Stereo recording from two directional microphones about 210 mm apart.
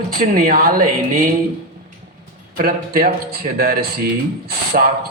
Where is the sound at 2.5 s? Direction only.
45° right (ahead or behind).